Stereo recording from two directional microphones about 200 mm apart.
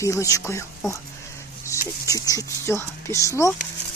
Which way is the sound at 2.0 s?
15° left (ahead or behind).